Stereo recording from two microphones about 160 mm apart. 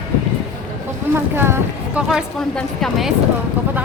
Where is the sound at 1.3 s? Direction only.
15° right (ahead or behind).